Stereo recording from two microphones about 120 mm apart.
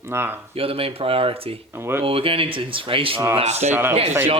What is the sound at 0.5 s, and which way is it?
Speech, 50° right (ahead or behind).